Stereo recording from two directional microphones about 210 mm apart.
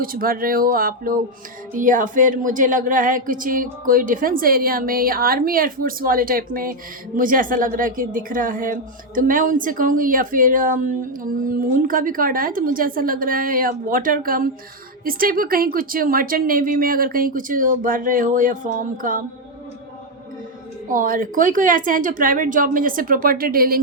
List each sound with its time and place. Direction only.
0.0 s speech: 45° right (ahead or behind)
20.9 s speech: 40° right (ahead or behind)